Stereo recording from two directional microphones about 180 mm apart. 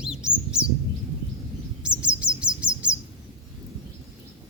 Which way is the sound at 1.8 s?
5° right (ahead or behind).